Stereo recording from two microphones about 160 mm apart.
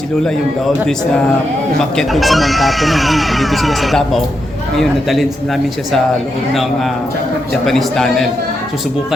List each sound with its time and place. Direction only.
1.8 s speech: centre (ahead or behind)
7.6 s speech: centre (ahead or behind)